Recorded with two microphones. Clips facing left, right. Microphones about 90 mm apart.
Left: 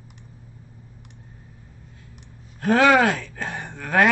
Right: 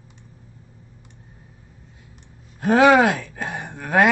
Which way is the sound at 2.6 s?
15° right (ahead or behind).